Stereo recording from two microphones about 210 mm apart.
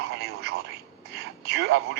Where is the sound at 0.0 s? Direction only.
50° right (ahead or behind).